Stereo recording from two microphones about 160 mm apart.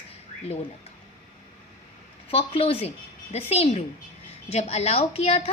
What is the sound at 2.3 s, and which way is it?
A woman's voice, 35° left (ahead or behind).